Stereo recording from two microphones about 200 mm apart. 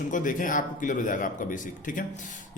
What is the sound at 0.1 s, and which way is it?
Speech, 40° left (ahead or behind).